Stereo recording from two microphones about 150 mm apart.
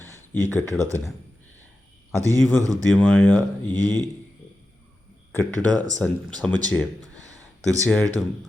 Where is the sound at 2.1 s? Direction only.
20° right (ahead or behind).